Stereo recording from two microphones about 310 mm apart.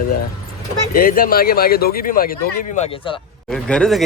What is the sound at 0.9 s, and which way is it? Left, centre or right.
Speech, left.